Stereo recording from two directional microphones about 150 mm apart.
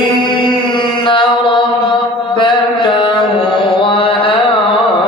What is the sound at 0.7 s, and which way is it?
Mantra, 35° left (ahead or behind).